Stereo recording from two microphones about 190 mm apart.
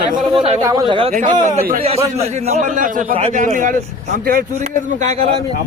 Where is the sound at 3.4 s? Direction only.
45° right (ahead or behind).